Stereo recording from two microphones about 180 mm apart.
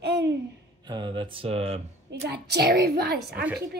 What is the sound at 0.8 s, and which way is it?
Speech, 25° right (ahead or behind).